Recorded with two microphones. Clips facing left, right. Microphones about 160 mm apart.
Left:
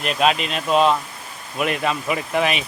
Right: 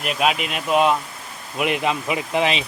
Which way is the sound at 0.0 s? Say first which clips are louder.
Left 2 dB; 5° right (ahead or behind).